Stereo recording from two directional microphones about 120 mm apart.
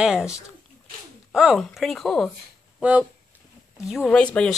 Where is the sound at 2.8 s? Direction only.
10° right (ahead or behind).